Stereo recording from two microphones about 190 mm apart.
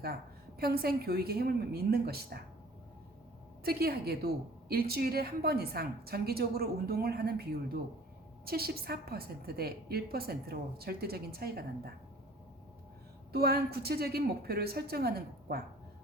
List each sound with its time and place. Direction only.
0.6 s a woman's voice: 50° right (ahead or behind)
3.6 s a woman's voice: 55° right (ahead or behind)
13.3 s a woman's voice: 55° right (ahead or behind)